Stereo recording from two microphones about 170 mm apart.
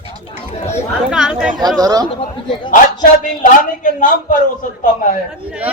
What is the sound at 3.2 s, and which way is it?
Speech, 50° left (ahead or behind).